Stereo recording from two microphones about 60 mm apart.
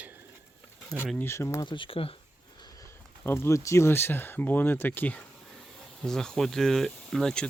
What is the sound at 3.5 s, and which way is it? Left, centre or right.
Speech, left.